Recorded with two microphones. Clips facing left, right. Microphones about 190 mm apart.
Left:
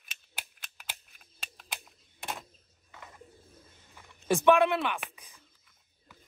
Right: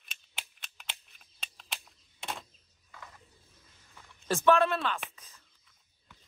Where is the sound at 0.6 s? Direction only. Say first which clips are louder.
Left 1 dB; centre (ahead or behind).